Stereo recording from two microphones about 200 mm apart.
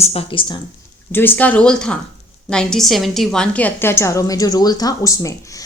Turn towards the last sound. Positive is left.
turn(degrees=15)  # may be behind; listen again after turning